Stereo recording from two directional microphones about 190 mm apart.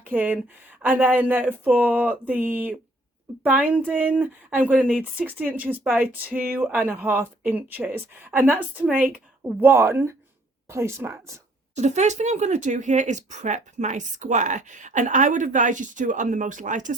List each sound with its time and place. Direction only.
0.1 s speech: 5° right (ahead or behind)
11.7 s speech: 35° right (ahead or behind)